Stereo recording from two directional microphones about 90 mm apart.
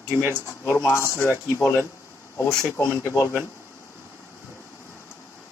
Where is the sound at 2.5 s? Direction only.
5° left (ahead or behind).